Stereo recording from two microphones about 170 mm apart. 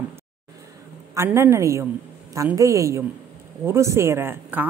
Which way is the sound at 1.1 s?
15° right (ahead or behind).